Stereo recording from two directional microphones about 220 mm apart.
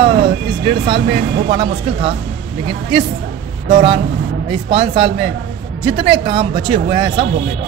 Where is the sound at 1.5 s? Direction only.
25° right (ahead or behind).